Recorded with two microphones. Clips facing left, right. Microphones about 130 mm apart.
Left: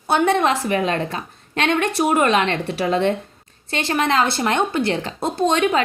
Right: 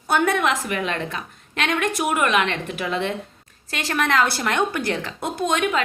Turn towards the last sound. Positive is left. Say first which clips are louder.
# left 4 dB
turn(degrees=30)  # may be behind; listen again after turning